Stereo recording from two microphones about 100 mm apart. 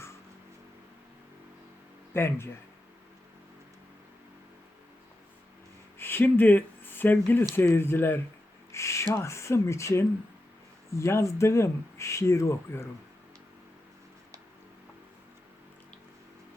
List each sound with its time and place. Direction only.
2.1 s speech: 25° left (ahead or behind)
6.0 s speech: 20° left (ahead or behind)
8.7 s owl: 30° left (ahead or behind)
9.1 s speech: 30° left (ahead or behind)